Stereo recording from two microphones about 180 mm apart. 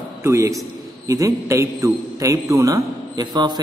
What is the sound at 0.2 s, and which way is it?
A man's voice, 15° right (ahead or behind).